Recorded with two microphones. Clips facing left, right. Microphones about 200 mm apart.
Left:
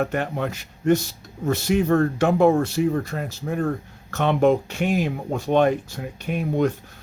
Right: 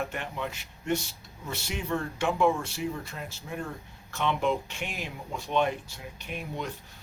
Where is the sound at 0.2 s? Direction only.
45° left (ahead or behind).